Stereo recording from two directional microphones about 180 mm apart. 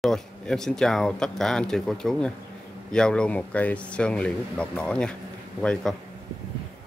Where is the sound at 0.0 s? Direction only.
5° left (ahead or behind).